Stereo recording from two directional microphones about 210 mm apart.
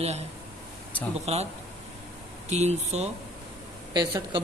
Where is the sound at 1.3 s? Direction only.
30° right (ahead or behind).